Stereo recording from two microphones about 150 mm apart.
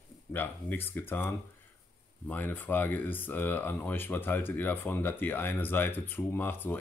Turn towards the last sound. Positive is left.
turn(degrees=15)  # may be behind; listen again after turning